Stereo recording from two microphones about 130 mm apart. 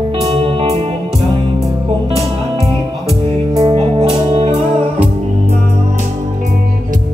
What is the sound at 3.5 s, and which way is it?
Music, 30° right (ahead or behind).